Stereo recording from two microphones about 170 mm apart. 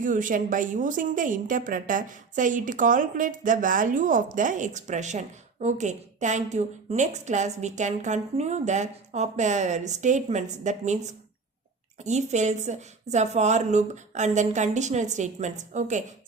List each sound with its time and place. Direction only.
0.0 s a woman's voice: 50° right (ahead or behind)